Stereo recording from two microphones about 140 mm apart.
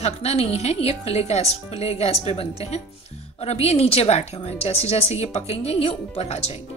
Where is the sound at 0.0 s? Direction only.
50° left (ahead or behind).